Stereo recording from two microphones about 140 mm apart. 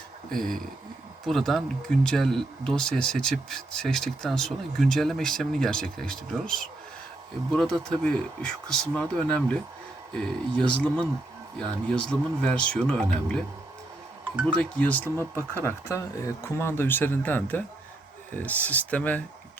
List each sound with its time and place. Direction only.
0.3 s speech: 5° left (ahead or behind)
14.4 s speech: 10° left (ahead or behind)